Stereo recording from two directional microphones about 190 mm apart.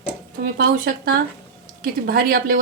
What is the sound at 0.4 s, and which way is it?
Speech, 50° right (ahead or behind).